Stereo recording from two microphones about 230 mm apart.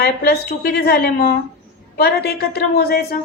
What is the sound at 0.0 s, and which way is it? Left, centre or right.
A woman's voice, left.